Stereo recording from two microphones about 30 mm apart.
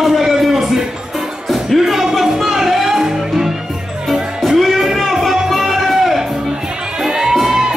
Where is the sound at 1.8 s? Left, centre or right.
Centre.